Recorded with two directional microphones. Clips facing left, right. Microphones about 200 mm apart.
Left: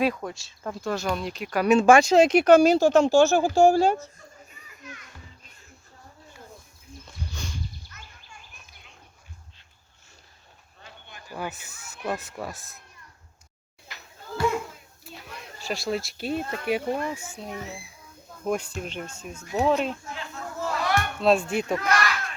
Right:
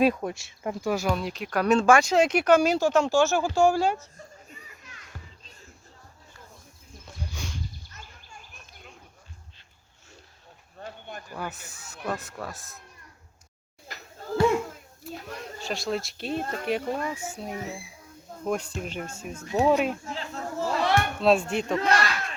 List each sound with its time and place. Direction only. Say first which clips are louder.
0.0 s speech: right 3 dB; 25° right (ahead or behind); by 1.9 s 5° left (ahead or behind)
1.9 s speech: left 4 dB; 20° left (ahead or behind)
2.1 s speech: left 4 dB; 35° left (ahead or behind)
7.9 s a sound: right 1 dB; 45° right (ahead or behind)
10.8 s a sound: right 9 dB; 50° right (ahead or behind)
11.3 s speech: left 4 dB; 5° left (ahead or behind)
15.1 s speech: right 5 dB; 45° right (ahead or behind)
15.6 s speech: left 1 dB; 5° left (ahead or behind)
16.3 s speech: even; 40° right (ahead or behind)
16.6 s speech: left 3 dB; 5° left (ahead or behind)
17.4 s speech: right 2 dB; 5° right (ahead or behind)
20.1 s a sound: right 3 dB; 35° right (ahead or behind)
21.2 s speech: left 1 dB; centre (ahead or behind)
21.8 s speech: right 1 dB; 30° right (ahead or behind)